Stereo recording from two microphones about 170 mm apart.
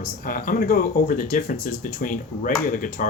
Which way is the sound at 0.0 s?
55° left (ahead or behind).